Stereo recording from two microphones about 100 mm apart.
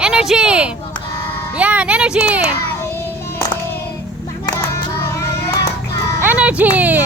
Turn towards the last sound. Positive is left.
turn(degrees=-15)  # may be behind; listen again after turning